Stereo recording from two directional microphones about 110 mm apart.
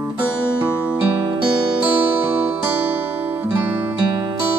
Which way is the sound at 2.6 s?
15° right (ahead or behind).